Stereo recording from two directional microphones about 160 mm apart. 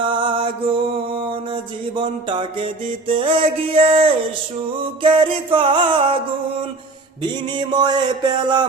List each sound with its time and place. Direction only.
0.1 s mantra: 30° right (ahead or behind)
2.0 s music: 30° right (ahead or behind)
7.2 s a sound: 30° right (ahead or behind)